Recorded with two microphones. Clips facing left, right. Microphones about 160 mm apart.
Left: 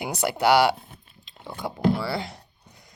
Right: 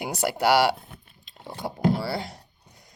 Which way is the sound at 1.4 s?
35° right (ahead or behind).